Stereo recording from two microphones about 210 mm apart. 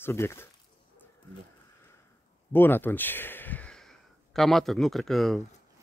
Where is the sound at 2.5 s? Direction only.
10° left (ahead or behind).